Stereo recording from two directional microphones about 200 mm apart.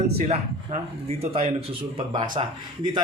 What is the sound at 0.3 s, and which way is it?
Speech, 30° right (ahead or behind).